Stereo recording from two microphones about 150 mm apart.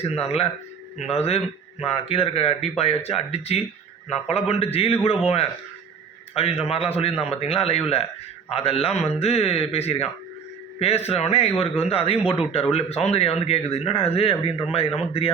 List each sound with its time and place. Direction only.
0.0 s a man's voice: 40° left (ahead or behind)